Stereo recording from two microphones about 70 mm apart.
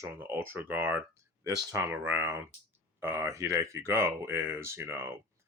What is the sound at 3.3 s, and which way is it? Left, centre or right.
Speech, right.